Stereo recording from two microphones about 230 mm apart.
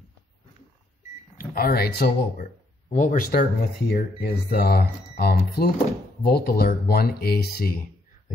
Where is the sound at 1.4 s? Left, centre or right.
Left.